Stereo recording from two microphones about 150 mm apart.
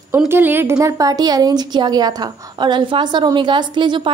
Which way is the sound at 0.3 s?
15° right (ahead or behind).